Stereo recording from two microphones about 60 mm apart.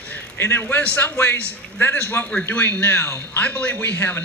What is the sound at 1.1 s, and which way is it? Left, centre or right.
Speech, left.